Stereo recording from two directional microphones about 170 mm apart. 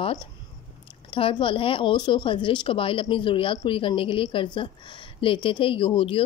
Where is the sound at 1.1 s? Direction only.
30° left (ahead or behind).